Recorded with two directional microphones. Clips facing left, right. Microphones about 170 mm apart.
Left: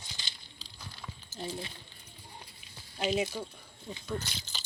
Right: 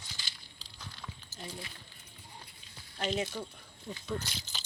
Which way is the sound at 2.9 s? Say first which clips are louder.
Left 3 dB; 5° left (ahead or behind).